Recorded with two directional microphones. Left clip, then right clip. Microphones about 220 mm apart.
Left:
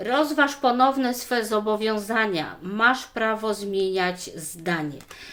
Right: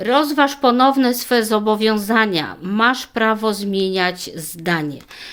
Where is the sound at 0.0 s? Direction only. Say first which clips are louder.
Right 6 dB; 50° right (ahead or behind).